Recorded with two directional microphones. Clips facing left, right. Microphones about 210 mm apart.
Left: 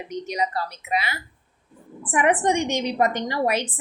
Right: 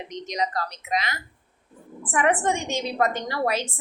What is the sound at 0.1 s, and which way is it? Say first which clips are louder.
A woman's voice: left 2 dB; 10° left (ahead or behind).